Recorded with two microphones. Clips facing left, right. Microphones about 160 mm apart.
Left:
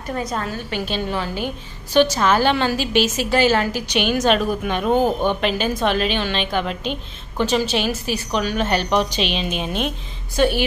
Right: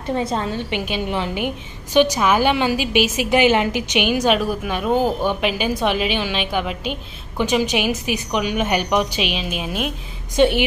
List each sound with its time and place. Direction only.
0.1 s a woman's voice: 25° right (ahead or behind); by 9.9 s 5° right (ahead or behind)
10.3 s a woman's voice: 20° right (ahead or behind)